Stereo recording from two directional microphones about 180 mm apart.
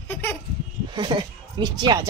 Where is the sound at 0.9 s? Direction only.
25° right (ahead or behind).